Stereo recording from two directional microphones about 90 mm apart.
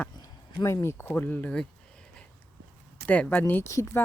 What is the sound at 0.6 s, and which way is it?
Speech, 35° left (ahead or behind).